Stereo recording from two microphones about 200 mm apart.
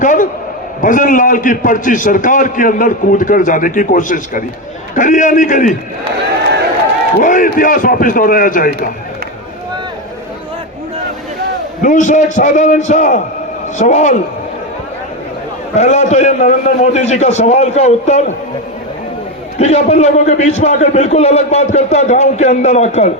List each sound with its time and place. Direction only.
0.0 s a man's voice: 40° left (ahead or behind)
7.2 s a man's voice: 40° left (ahead or behind)
11.8 s a man's voice: 40° left (ahead or behind)
15.7 s a man's voice: 35° left (ahead or behind)
19.5 s a man's voice: 35° left (ahead or behind)